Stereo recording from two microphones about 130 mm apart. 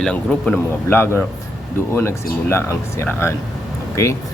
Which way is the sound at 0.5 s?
15° left (ahead or behind).